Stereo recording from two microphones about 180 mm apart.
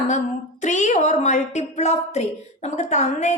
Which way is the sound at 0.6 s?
40° left (ahead or behind).